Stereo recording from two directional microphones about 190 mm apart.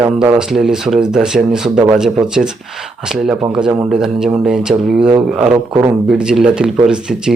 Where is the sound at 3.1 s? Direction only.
5° right (ahead or behind).